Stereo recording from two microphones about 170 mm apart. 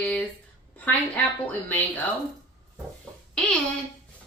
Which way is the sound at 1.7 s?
10° left (ahead or behind).